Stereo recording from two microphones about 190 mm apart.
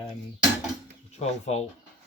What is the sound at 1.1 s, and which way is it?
Speech, 35° left (ahead or behind).